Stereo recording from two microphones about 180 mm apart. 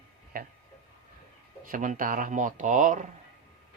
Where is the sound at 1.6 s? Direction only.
50° right (ahead or behind).